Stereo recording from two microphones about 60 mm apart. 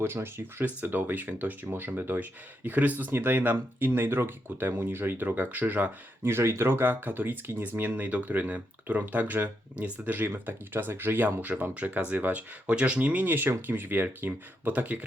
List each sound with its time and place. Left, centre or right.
0.0 s speech: right
6.2 s speech: right